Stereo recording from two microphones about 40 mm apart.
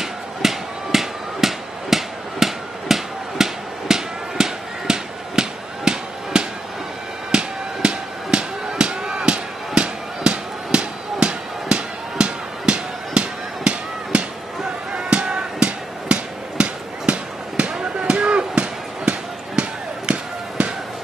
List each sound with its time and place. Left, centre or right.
0.0 s hammer: centre
7.2 s music: right
20.1 s a sound: right